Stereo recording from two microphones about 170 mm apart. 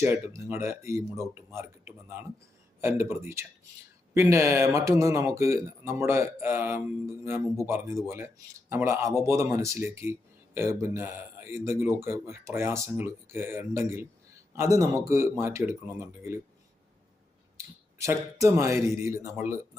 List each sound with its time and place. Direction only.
0.0 s speech: 15° right (ahead or behind)
17.9 s speech: 20° right (ahead or behind)